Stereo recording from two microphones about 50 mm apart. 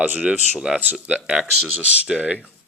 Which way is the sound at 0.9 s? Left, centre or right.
Centre.